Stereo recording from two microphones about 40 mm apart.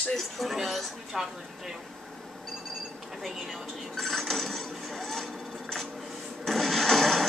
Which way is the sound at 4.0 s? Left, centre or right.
Centre.